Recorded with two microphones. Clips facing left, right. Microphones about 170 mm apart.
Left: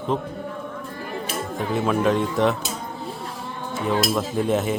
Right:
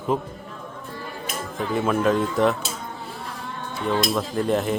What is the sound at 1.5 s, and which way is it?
Speech, centre (ahead or behind).